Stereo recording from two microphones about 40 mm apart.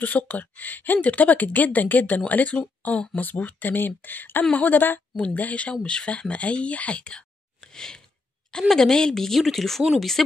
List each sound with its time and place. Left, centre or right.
0.0 s speech: left
5.1 s speech: left
5.8 s speech: left
7.0 s a sound: left
8.5 s a woman's voice: centre